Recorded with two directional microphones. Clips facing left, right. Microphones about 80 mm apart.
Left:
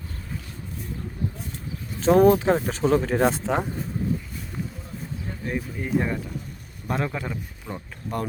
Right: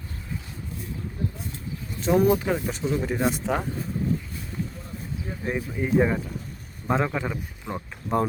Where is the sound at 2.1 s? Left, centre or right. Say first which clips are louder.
Left 4 dB; left.